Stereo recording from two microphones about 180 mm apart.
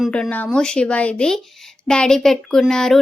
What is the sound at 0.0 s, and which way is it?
Speech, 5° left (ahead or behind).